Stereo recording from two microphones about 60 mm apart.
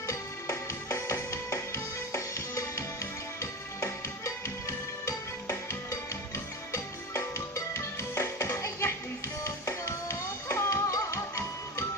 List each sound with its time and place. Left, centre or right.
0.1 s music: left